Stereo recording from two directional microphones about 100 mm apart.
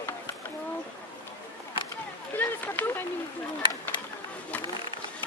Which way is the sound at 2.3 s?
20° left (ahead or behind).